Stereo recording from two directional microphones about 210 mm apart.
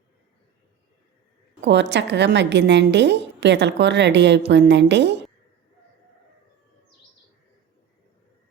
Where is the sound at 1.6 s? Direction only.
55° right (ahead or behind).